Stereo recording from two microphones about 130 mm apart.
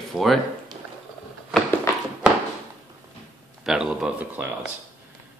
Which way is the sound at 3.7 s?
5° right (ahead or behind).